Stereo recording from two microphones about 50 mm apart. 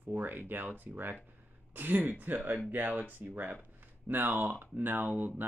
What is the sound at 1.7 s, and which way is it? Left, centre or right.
Speech, right.